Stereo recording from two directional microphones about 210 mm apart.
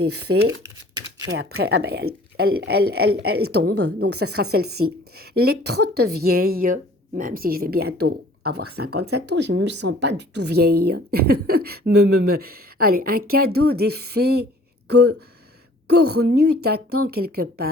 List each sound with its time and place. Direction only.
0.3 s speech: 60° right (ahead or behind)
1.3 s speech: 50° right (ahead or behind)
3.4 s a woman's voice: 90° right
4.0 s speech: 50° right (ahead or behind)